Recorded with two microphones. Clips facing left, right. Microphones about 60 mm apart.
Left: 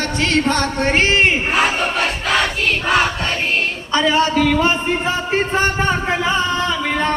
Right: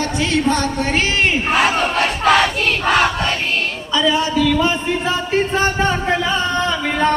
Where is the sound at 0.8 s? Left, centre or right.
Left.